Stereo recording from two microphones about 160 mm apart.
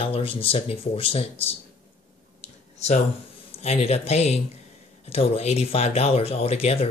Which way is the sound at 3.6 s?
40° left (ahead or behind).